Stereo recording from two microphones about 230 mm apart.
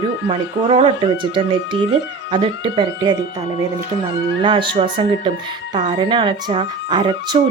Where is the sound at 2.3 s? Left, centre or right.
Right.